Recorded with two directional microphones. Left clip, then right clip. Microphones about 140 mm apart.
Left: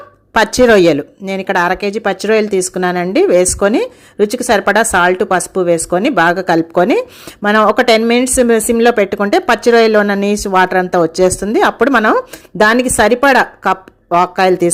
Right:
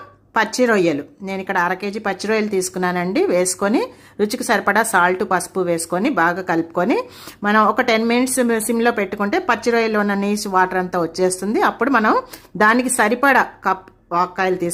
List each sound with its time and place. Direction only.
0.3 s speech: 40° left (ahead or behind)